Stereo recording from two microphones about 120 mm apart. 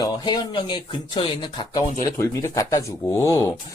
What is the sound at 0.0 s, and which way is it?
Speech, 40° left (ahead or behind).